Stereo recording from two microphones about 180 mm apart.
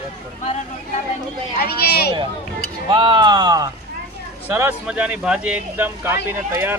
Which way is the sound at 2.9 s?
25° right (ahead or behind).